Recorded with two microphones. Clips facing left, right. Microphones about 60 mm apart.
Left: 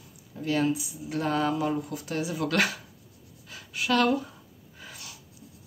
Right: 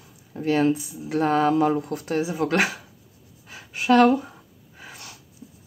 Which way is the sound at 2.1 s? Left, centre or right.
Right.